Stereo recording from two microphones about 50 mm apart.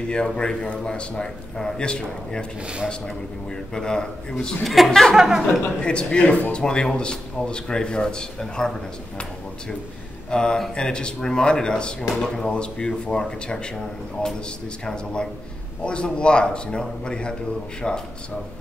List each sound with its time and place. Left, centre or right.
0.3 s a man's voice: centre
2.6 s speech: right
3.7 s a man's voice: centre
4.6 s speech: centre
5.1 s speech: centre
5.8 s a man's voice: centre
10.3 s a man's voice: centre
15.8 s a man's voice: centre